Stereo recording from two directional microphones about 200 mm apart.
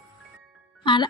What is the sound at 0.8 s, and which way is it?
Music, 25° left (ahead or behind).